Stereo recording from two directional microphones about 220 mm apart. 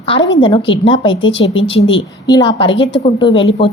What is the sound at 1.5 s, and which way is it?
Speech, 60° left (ahead or behind).